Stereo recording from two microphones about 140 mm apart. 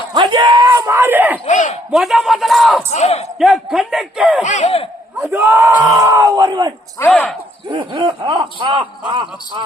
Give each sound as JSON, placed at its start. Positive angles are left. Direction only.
{"t": 0.1, "sound": "a sound", "side_deg": -30}
{"t": 1.5, "sound": "a sound", "side_deg": 60}
{"t": 1.9, "sound": "a man's voice", "side_deg": 0}
{"t": 2.9, "sound": "speech", "side_deg": 50}
{"t": 3.3, "sound": "a man's voice", "side_deg": 0}
{"t": 4.4, "sound": "a sound", "side_deg": 55}
{"t": 5.2, "sound": "speech", "side_deg": -15}
{"t": 7.0, "sound": "speech", "side_deg": 10}
{"t": 7.7, "sound": "speech", "side_deg": -35}